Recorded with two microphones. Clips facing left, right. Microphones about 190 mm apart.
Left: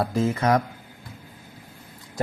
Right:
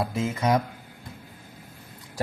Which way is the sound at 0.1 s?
30° left (ahead or behind).